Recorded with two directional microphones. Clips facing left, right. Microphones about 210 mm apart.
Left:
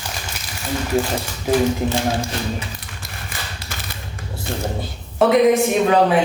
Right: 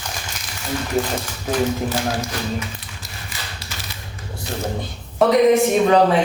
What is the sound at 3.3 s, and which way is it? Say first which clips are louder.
Typewriter: left 3 dB; 55° left (ahead or behind).